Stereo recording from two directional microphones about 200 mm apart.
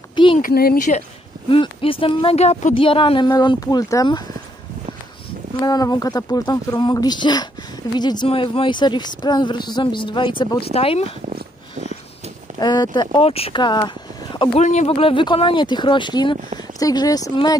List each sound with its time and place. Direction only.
0.1 s a sound: 25° left (ahead or behind)
0.4 s speech: 50° left (ahead or behind)
1.5 s speech: 25° left (ahead or behind)
5.6 s speech: 20° left (ahead or behind)
11.2 s dog: 35° right (ahead or behind)
12.5 s speech: 20° left (ahead or behind)
14.6 s speech: 35° left (ahead or behind); by 17.6 s 20° left (ahead or behind)